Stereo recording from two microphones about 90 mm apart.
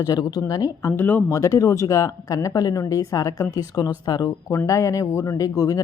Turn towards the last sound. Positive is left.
turn(degrees=40)  # may be behind; listen again after turning